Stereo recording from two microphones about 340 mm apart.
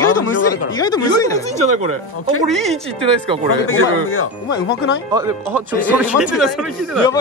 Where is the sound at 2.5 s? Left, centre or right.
Centre.